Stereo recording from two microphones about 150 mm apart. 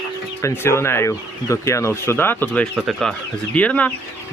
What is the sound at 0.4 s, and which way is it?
Speech, 15° left (ahead or behind).